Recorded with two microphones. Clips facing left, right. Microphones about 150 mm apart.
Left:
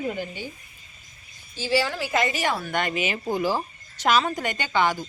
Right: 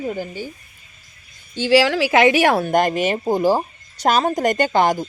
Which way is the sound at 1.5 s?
75° right (ahead or behind).